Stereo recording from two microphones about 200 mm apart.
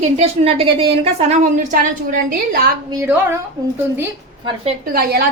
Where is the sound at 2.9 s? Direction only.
15° right (ahead or behind).